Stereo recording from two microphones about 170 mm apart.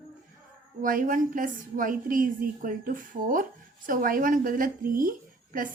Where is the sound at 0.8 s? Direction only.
50° right (ahead or behind).